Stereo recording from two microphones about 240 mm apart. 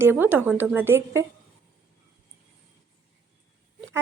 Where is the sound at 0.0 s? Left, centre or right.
Centre.